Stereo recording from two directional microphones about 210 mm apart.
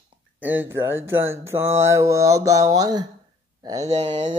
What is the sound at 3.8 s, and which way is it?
Speech, 30° right (ahead or behind).